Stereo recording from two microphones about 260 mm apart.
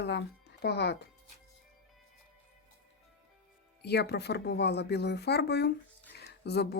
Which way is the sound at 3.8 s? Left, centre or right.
Left.